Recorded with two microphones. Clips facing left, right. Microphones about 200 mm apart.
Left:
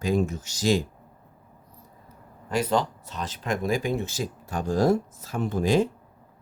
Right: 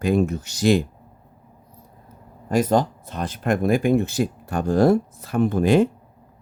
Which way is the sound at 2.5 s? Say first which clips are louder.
Right 5 dB; 45° right (ahead or behind).